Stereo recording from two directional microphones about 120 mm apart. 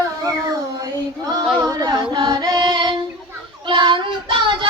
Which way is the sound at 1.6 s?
30° right (ahead or behind).